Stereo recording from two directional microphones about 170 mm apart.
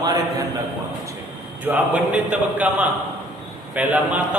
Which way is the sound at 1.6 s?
10° right (ahead or behind).